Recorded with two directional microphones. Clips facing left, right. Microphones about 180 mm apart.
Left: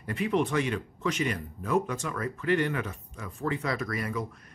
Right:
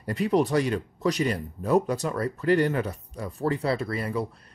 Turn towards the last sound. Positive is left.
turn(degrees=-35)  # may be behind; listen again after turning